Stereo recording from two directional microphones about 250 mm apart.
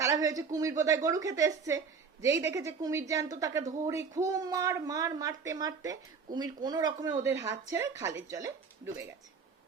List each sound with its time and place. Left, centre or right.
0.0 s a woman's voice: centre